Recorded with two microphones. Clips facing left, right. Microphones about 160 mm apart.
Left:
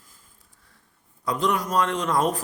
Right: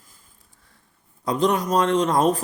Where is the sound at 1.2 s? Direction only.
25° right (ahead or behind).